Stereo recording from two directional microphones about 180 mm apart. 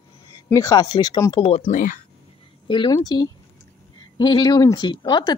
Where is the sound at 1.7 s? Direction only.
50° left (ahead or behind).